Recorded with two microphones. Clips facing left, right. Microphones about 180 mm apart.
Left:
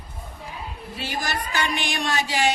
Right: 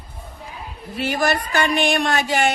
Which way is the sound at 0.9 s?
55° right (ahead or behind).